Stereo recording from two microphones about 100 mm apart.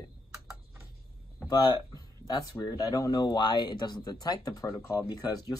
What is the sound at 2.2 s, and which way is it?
Speech, 40° left (ahead or behind).